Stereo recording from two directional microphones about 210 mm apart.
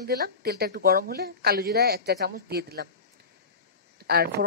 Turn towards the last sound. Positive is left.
turn(degrees=-50)  # may be behind; listen again after turning